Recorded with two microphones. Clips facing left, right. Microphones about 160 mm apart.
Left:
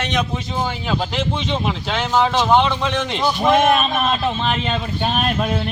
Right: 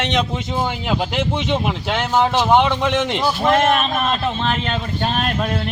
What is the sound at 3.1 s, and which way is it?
Speech, 5° right (ahead or behind).